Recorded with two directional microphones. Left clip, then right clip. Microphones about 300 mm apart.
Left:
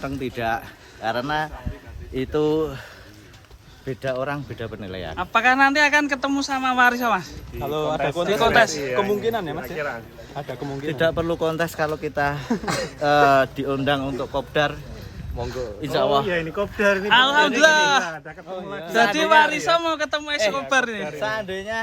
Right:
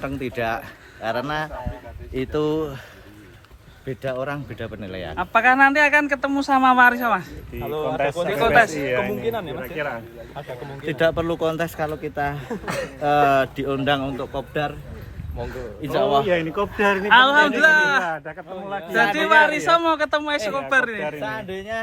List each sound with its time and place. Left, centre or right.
0.0 s speech: centre
3.8 s speech: centre
7.7 s speech: left
8.4 s speech: centre
9.2 s speech: left
9.7 s speech: right
10.8 s speech: centre
12.5 s speech: left
13.0 s speech: centre
16.2 s speech: right
17.1 s speech: centre
18.1 s speech: centre
18.9 s speech: centre